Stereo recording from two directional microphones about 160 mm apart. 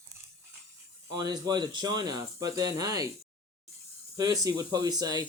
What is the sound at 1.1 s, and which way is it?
Speech, 25° right (ahead or behind).